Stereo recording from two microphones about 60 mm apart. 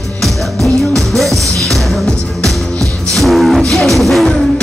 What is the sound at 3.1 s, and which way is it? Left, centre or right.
Music, centre.